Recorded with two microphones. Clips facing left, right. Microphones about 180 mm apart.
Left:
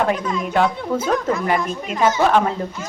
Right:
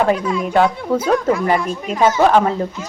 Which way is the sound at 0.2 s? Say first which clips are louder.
Right 3 dB; 10° right (ahead or behind).